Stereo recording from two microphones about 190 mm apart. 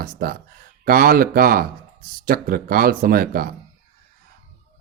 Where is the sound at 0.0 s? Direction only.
50° right (ahead or behind).